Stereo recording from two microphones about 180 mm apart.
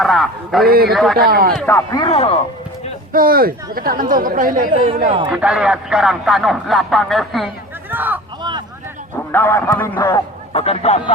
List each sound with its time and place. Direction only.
0.0 s speech: centre (ahead or behind)
0.7 s speech: 55° right (ahead or behind)
0.9 s speech: centre (ahead or behind)
1.2 s speech: 55° right (ahead or behind)
1.6 s a man's voice: 15° left (ahead or behind)
2.0 s speech: 30° left (ahead or behind)
3.1 s speech: 55° right (ahead or behind)
4.7 s speech: 35° right (ahead or behind)
5.2 s speech: 5° right (ahead or behind)
7.9 s speech: 10° right (ahead or behind)
9.3 s a man's voice: 10° left (ahead or behind)
10.5 s speech: 35° left (ahead or behind)